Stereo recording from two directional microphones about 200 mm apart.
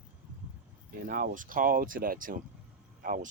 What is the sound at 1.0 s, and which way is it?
Speech, 40° right (ahead or behind).